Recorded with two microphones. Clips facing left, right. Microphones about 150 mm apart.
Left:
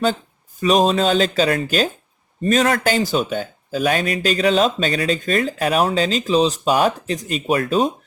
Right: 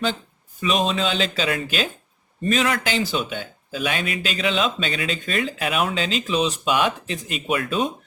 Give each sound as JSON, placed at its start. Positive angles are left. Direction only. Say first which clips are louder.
{"t": 0.6, "sound": "speech", "louder": "left 6 dB", "side_deg": 40}